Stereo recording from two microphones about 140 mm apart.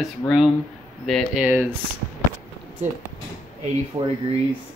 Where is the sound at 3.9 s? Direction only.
25° right (ahead or behind).